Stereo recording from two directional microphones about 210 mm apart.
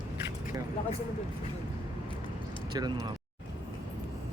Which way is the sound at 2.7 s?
20° right (ahead or behind).